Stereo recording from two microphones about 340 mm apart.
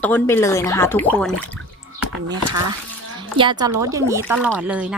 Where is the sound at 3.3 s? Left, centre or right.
Centre.